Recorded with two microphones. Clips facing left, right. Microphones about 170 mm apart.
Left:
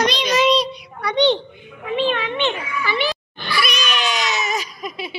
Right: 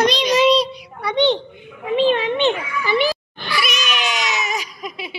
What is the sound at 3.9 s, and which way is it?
Baby cry, 15° right (ahead or behind).